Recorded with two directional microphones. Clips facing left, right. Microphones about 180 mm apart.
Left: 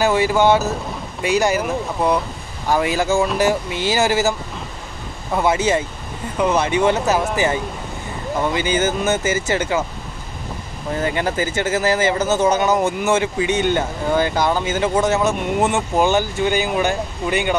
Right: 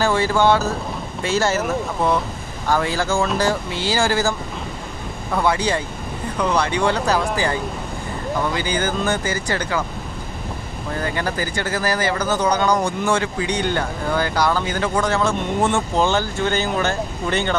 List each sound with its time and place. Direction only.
0.0 s speech: 15° left (ahead or behind)
2.7 s speech: 15° left (ahead or behind)
11.0 s speech: 20° left (ahead or behind)